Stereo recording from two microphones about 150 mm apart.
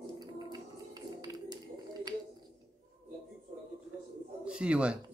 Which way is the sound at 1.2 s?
25° right (ahead or behind).